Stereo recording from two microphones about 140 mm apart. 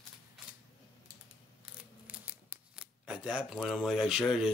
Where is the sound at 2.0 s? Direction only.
10° right (ahead or behind).